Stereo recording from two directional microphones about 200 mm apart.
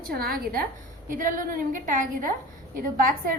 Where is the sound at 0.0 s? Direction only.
50° right (ahead or behind).